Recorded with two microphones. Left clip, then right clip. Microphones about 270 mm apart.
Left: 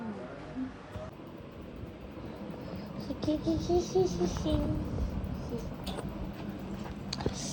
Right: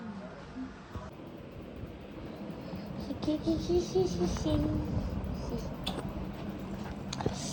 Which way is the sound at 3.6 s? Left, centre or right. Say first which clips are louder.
Left 1 dB; centre.